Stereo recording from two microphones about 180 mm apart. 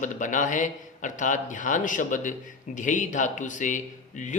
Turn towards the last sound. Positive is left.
turn(degrees=45)  # may be behind; listen again after turning